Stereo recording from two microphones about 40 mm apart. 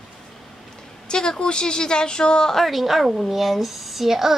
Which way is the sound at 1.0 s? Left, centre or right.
Centre.